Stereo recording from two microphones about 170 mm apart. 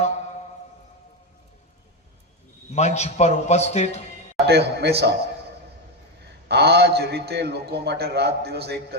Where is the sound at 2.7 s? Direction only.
40° left (ahead or behind).